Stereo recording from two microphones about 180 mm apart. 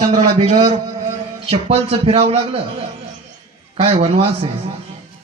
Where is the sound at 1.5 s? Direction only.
35° right (ahead or behind).